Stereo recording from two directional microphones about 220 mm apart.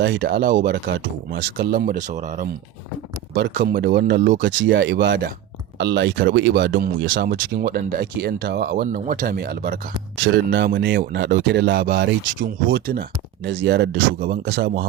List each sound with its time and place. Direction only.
0.0 s speech: 55° right (ahead or behind)
0.7 s speech: 50° right (ahead or behind); by 2.5 s 35° right (ahead or behind)
3.3 s speech: 45° right (ahead or behind)
4.4 s speech: 55° right (ahead or behind)